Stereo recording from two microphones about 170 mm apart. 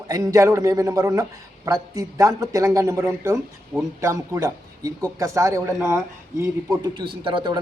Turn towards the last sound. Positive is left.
turn(degrees=-30)  # may be behind; listen again after turning